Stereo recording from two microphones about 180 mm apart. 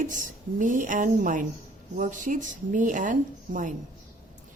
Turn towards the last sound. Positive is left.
turn(degrees=-45)  # may be behind; listen again after turning